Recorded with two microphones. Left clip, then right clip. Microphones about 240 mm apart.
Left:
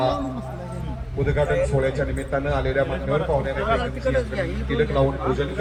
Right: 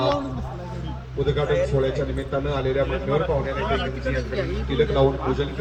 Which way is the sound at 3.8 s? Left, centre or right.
Centre.